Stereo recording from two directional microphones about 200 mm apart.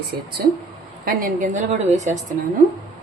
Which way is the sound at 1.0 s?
45° right (ahead or behind).